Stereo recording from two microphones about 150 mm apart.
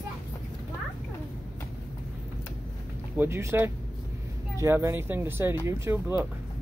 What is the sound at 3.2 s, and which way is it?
Speech, 15° right (ahead or behind).